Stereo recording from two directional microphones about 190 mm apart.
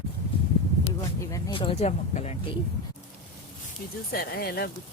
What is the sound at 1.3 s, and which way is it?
Speech, 25° left (ahead or behind).